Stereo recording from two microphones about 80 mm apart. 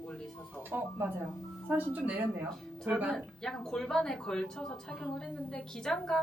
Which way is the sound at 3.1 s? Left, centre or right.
Centre.